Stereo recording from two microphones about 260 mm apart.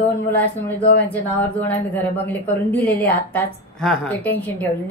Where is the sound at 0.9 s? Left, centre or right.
Centre.